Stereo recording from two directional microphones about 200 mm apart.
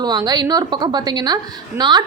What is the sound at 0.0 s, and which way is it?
A woman's voice, 20° right (ahead or behind).